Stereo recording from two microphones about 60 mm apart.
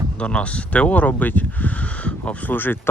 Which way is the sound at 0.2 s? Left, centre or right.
Centre.